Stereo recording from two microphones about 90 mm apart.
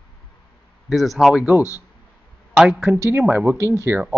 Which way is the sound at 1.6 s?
35° left (ahead or behind).